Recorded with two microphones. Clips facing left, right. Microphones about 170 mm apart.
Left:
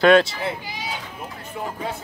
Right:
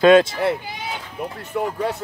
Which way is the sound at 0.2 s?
60° right (ahead or behind).